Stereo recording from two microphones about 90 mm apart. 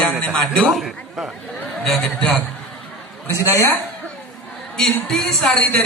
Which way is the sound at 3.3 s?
35° left (ahead or behind).